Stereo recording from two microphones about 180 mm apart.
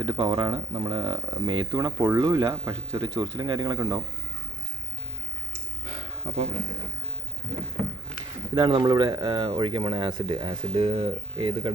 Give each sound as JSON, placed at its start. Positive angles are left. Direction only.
{"t": 0.0, "sound": "speech", "side_deg": -25}
{"t": 5.9, "sound": "a sound", "side_deg": -35}
{"t": 8.5, "sound": "speech", "side_deg": -25}